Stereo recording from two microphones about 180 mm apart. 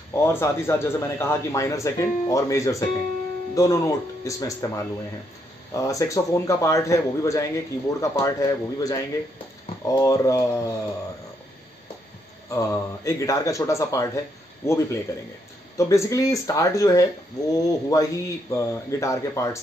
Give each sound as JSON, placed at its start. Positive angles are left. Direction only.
{"t": 0.1, "sound": "a man's voice", "side_deg": 15}
{"t": 12.4, "sound": "a man's voice", "side_deg": 15}